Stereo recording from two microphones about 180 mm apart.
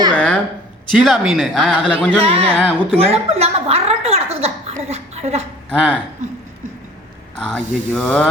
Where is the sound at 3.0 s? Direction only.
35° right (ahead or behind).